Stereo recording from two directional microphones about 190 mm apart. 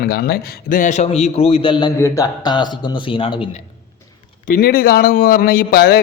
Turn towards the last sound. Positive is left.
turn(degrees=55)  # may be behind; listen again after turning